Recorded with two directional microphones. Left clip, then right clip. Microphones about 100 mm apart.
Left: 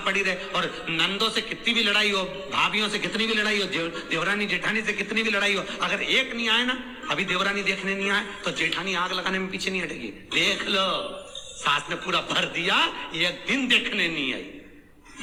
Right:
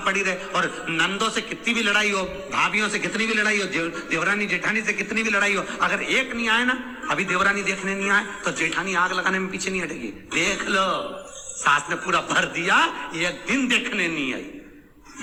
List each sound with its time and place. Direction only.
0.0 s a man's voice: 25° left (ahead or behind)